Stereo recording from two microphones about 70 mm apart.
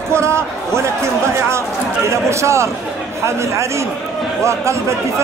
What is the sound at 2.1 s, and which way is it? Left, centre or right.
Speech, right.